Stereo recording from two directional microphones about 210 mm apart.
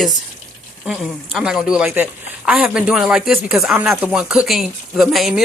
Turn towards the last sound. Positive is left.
turn(degrees=0)  # may be behind; listen again after turning